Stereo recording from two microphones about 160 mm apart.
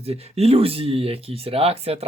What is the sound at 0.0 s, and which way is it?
Speech, 40° right (ahead or behind).